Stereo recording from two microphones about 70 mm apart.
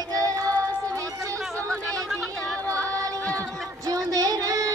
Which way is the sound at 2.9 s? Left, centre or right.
Right.